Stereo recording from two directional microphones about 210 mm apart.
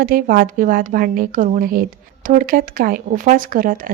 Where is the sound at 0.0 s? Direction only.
45° right (ahead or behind).